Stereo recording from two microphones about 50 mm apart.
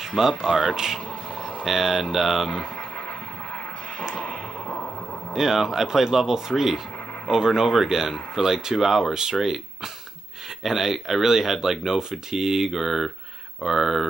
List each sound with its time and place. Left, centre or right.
0.1 s speech: centre
4.1 s a sound: centre
5.3 s speech: centre
10.6 s speech: centre